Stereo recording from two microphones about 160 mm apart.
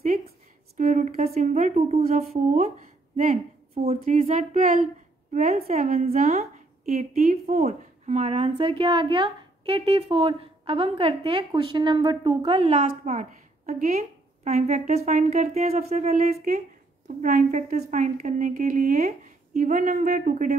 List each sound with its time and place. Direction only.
0.7 s speech: 50° right (ahead or behind)
3.7 s a woman's voice: 40° right (ahead or behind)
12.4 s a woman's voice: 40° right (ahead or behind)
17.2 s a woman's voice: 55° right (ahead or behind)